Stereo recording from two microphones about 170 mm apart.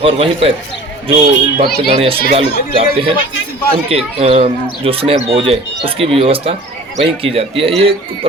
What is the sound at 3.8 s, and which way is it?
Speech, 35° right (ahead or behind).